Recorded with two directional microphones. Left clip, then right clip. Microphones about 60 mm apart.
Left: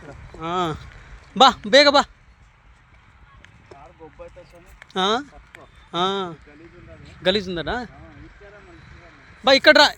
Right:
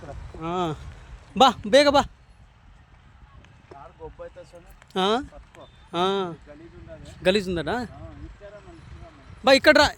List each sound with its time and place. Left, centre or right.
0.3 s a man's voice: centre
4.0 s vehicle: right
4.4 s a sound: right
4.9 s speech: right
5.9 s speech: right
7.3 s a man's voice: right
8.8 s vehicle: centre
9.4 s speech: right